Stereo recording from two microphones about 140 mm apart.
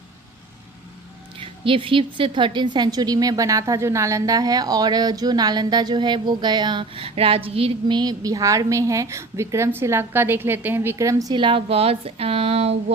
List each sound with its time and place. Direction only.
1.4 s a woman's voice: 40° right (ahead or behind)